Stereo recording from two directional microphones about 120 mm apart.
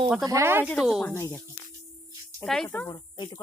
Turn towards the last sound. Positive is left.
turn(degrees=35)  # may be behind; listen again after turning